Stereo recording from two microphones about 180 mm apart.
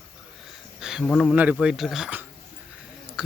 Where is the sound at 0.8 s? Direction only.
5° right (ahead or behind).